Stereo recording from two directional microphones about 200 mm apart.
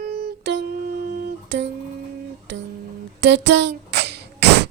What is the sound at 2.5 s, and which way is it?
Guitar, 65° right (ahead or behind).